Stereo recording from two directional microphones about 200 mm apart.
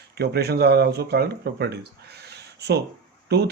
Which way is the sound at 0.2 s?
55° right (ahead or behind).